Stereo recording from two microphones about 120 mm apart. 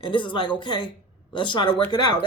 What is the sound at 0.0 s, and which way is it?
Speech, 45° left (ahead or behind).